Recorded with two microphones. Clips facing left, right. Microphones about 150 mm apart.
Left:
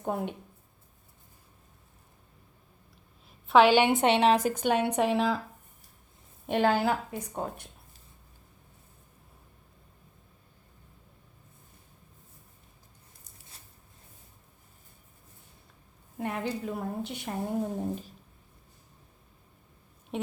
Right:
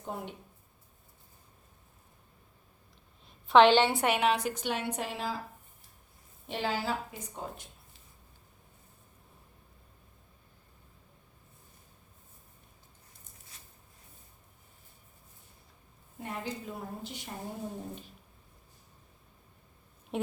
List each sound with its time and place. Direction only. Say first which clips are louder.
0.0 s a woman's voice: left 7 dB; 55° left (ahead or behind)
3.2 s a woman's voice: even; 5° left (ahead or behind); by 4.3 s 25° left (ahead or behind)
4.3 s a woman's voice: left 6 dB; 45° left (ahead or behind); by 5.4 s 80° left
6.5 s a woman's voice: left 8 dB; 55° left (ahead or behind)
16.1 s a woman's voice: left 6 dB; 65° left (ahead or behind)
17.7 s a sound: left 8 dB; 40° left (ahead or behind)
20.1 s speech: right 1 dB; centre (ahead or behind)